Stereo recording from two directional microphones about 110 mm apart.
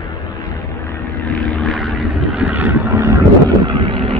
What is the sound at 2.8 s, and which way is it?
Vehicle, 30° right (ahead or behind).